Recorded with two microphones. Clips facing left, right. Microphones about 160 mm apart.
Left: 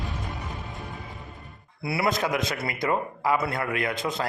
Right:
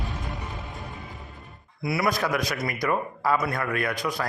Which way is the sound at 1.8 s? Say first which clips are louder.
Even; 25° left (ahead or behind).